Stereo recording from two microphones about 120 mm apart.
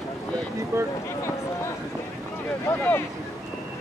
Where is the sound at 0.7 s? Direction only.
25° right (ahead or behind).